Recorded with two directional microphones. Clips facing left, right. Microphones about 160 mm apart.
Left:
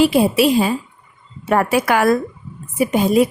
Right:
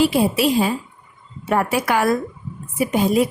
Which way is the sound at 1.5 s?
75° left (ahead or behind).